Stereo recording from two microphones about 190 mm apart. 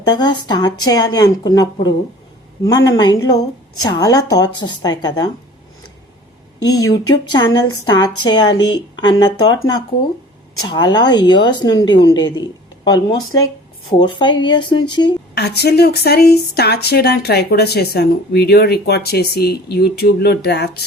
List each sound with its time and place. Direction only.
0.1 s a woman's voice: 25° left (ahead or behind)
2.9 s a woman's voice: 20° left (ahead or behind)
6.6 s a woman's voice: 20° left (ahead or behind)
15.4 s speech: 60° left (ahead or behind)